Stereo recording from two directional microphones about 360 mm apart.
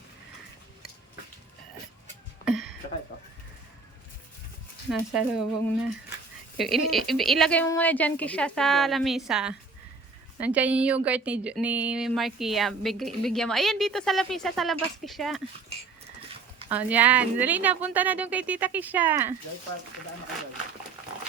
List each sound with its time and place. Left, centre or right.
2.4 s a sound: centre
4.9 s speech: centre
16.6 s speech: centre